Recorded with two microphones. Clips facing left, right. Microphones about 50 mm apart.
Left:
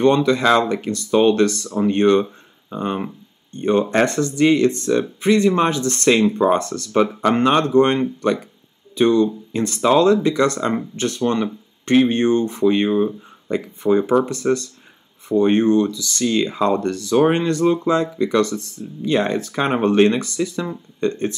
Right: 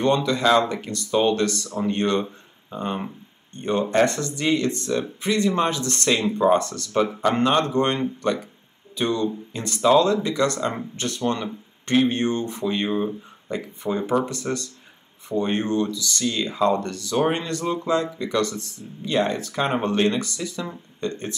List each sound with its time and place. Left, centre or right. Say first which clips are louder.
0.0 s speech: left 5 dB; left
15.6 s speech: left 7 dB; left
19.0 s speech: left 4 dB; left